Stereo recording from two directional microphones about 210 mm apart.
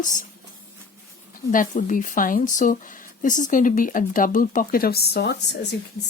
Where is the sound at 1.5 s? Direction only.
40° left (ahead or behind).